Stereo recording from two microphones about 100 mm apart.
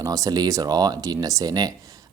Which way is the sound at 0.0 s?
35° right (ahead or behind).